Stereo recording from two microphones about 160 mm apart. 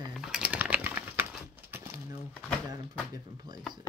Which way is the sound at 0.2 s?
5° right (ahead or behind).